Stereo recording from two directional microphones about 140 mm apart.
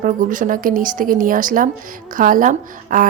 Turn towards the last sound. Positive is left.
turn(degrees=-70)  # may be behind; listen again after turning